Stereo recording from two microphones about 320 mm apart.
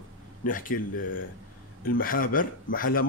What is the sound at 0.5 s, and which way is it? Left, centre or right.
Speech, left.